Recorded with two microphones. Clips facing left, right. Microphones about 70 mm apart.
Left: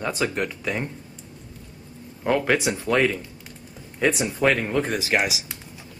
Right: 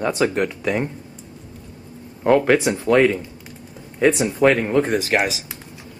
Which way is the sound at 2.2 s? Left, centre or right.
Centre.